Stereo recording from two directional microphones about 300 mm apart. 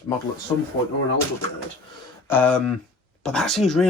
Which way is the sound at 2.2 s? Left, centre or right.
Centre.